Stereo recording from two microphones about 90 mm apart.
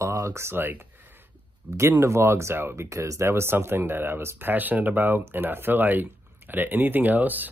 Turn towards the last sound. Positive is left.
turn(degrees=-20)  # may be behind; listen again after turning